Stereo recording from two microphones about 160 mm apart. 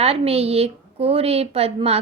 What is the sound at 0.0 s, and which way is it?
A woman's voice, 40° right (ahead or behind).